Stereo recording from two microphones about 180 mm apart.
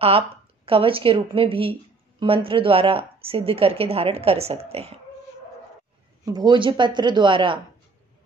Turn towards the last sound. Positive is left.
turn(degrees=-25)  # may be behind; listen again after turning